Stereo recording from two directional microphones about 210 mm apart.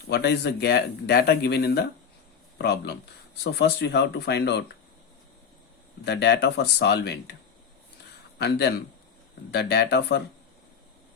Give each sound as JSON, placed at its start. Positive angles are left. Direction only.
{"t": 0.1, "sound": "speech", "side_deg": 50}
{"t": 6.1, "sound": "speech", "side_deg": 55}
{"t": 8.4, "sound": "speech", "side_deg": 50}